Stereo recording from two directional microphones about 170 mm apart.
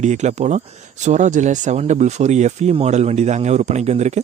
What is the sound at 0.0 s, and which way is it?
Speech, 45° right (ahead or behind).